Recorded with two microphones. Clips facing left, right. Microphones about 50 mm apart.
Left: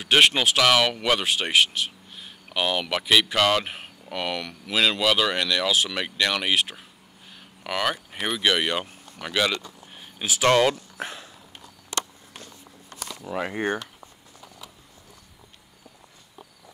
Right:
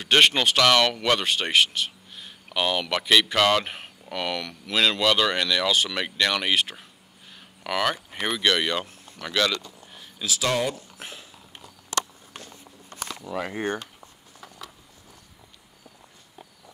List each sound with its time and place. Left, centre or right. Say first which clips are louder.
0.0 s speech: even; centre; by 10.4 s left
10.4 s speech: left 7 dB; left
13.3 s speech: left 2 dB; centre